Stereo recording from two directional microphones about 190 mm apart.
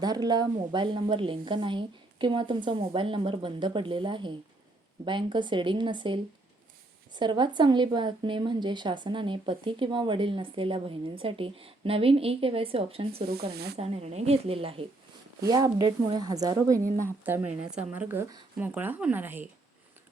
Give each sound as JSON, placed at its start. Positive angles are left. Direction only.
{"t": 0.0, "sound": "a woman's voice", "side_deg": -20}
{"t": 13.5, "sound": "speech", "side_deg": -55}
{"t": 13.7, "sound": "a woman's voice", "side_deg": -35}